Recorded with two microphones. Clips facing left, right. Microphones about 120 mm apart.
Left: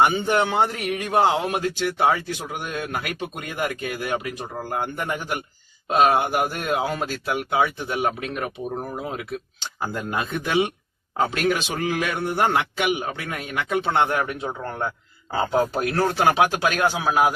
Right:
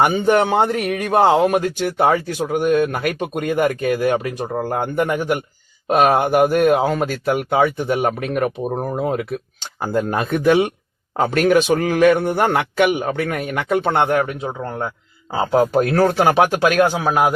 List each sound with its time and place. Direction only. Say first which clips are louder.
0.0 s speech: right 4 dB; 45° right (ahead or behind)
5.9 s speech: right 4 dB; 55° right (ahead or behind)
14.3 s speech: right 3 dB; 30° right (ahead or behind)
16.0 s speech: right 3 dB; 50° right (ahead or behind)